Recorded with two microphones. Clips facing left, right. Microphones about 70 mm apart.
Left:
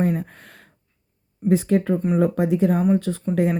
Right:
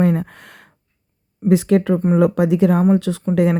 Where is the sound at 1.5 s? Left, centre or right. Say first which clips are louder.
Right 4 dB; right.